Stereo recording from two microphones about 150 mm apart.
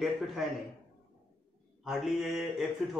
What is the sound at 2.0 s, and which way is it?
Speech, centre (ahead or behind).